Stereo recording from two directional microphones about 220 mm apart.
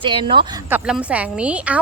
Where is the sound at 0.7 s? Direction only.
5° right (ahead or behind).